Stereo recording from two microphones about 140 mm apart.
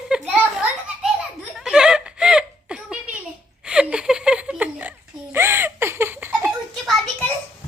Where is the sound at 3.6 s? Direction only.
5° right (ahead or behind).